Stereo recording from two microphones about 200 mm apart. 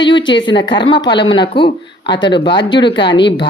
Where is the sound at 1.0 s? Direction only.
60° left (ahead or behind).